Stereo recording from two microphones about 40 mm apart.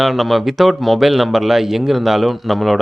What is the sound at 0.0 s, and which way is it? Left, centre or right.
Speech, centre.